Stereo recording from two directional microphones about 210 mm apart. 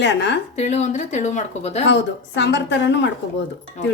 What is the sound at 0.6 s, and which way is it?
Speech, 35° left (ahead or behind).